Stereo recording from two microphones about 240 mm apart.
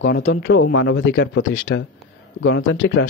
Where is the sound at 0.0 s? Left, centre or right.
Left.